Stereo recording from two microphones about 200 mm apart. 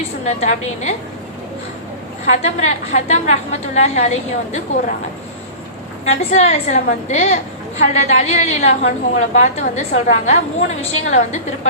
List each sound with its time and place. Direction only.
0.3 s a woman's voice: 35° left (ahead or behind)
2.3 s a woman's voice: 35° left (ahead or behind)
6.3 s a woman's voice: 35° left (ahead or behind)